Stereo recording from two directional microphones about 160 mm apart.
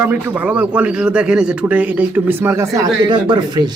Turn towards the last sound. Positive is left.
turn(degrees=-30)  # may be behind; listen again after turning